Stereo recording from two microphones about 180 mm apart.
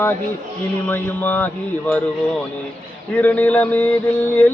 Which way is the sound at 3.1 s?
10° left (ahead or behind).